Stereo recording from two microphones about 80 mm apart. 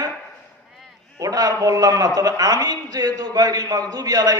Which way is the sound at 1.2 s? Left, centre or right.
Right.